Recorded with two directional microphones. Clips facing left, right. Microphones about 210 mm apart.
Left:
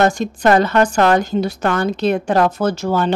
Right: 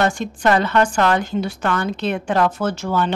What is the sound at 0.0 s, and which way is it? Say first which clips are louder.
Speech: left 4 dB; 40° left (ahead or behind).